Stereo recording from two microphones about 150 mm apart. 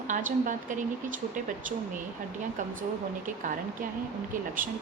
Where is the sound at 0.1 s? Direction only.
60° right (ahead or behind).